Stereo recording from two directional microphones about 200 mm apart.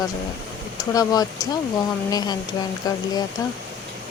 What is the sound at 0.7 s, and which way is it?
Speech, 20° left (ahead or behind).